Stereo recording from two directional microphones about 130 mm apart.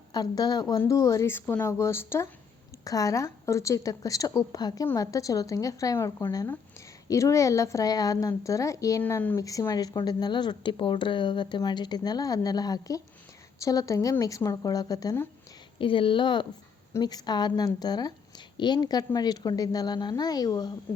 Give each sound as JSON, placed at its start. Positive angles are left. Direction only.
{"t": 0.1, "sound": "a woman's voice", "side_deg": 30}
{"t": 15.8, "sound": "a woman's voice", "side_deg": 40}